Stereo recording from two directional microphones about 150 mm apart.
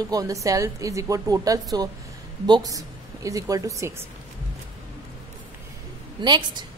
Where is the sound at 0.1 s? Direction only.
25° right (ahead or behind).